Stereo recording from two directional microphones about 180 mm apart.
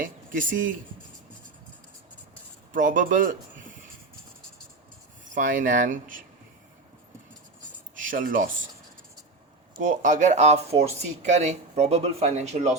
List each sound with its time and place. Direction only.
0.0 s speech: 50° right (ahead or behind)
2.7 s speech: 45° right (ahead or behind)
5.3 s speech: 45° right (ahead or behind)
7.9 s speech: 50° right (ahead or behind)
9.7 s speech: 45° right (ahead or behind)